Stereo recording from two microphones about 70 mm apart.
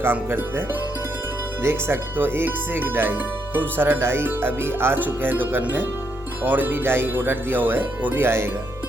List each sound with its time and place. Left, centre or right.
0.0 s speech: right
1.6 s speech: right